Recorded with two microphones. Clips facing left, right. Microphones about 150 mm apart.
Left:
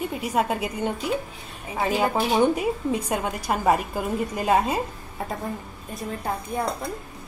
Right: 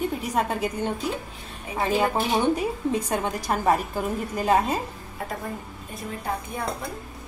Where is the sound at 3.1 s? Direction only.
10° left (ahead or behind).